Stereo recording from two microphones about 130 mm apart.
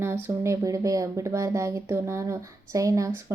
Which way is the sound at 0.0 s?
20° right (ahead or behind).